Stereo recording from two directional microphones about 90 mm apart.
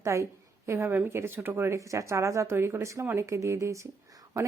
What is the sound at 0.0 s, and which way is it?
A woman's voice, 35° right (ahead or behind).